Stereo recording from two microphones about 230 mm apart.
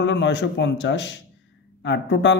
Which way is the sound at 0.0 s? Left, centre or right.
Left.